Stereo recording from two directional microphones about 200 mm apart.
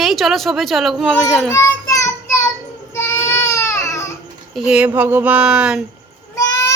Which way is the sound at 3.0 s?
15° left (ahead or behind).